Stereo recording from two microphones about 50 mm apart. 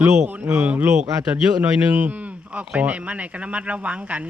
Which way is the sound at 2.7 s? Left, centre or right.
Right.